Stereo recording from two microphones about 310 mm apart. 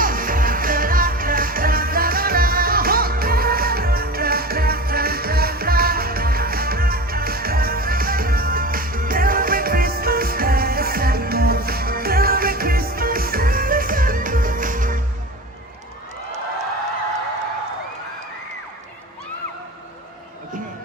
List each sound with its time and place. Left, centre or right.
0.0 s music: right